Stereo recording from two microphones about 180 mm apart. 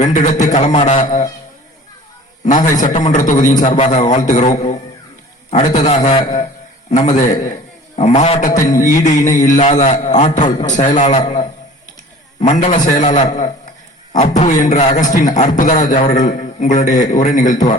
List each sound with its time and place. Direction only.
0.0 s a man's voice: 45° left (ahead or behind)
1.0 s a man's voice: 45° left (ahead or behind)
2.4 s a man's voice: 45° left (ahead or behind)
12.4 s a man's voice: 40° left (ahead or behind)